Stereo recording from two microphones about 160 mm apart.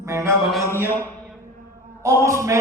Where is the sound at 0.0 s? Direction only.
20° right (ahead or behind).